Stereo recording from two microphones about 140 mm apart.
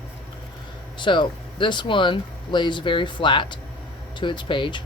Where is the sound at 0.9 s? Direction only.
35° left (ahead or behind).